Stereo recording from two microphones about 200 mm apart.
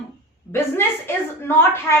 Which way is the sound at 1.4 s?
10° left (ahead or behind).